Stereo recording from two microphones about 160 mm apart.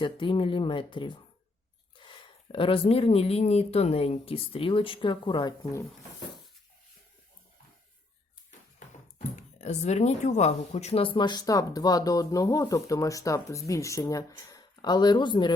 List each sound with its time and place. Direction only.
0.0 s speech: 30° left (ahead or behind)
9.1 s speech: 45° left (ahead or behind); by 15.5 s 30° left (ahead or behind)